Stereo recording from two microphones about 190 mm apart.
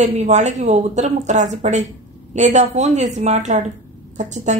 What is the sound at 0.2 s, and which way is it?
A woman's voice, 40° right (ahead or behind).